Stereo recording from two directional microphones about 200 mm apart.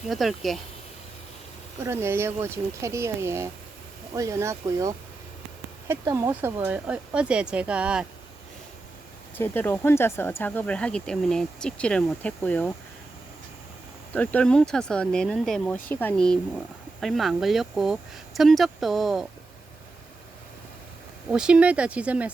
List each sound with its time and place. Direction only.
0.1 s speech: centre (ahead or behind)
1.8 s speech: 10° right (ahead or behind)
9.4 s speech: 10° left (ahead or behind)
14.1 s speech: 10° left (ahead or behind)
21.2 s speech: 5° right (ahead or behind)